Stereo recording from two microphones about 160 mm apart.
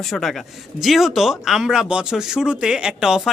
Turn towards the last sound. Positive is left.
turn(degrees=-5)  # may be behind; listen again after turning